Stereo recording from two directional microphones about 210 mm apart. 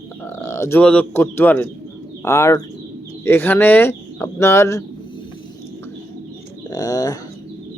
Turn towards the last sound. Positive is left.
turn(degrees=15)  # may be behind; listen again after turning